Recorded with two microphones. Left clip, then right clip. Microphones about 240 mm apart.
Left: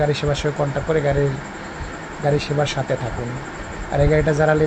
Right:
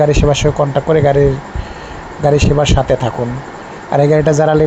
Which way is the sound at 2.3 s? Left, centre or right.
Right.